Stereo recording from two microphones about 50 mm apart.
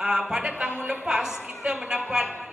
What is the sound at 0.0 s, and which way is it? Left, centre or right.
A woman's voice, centre.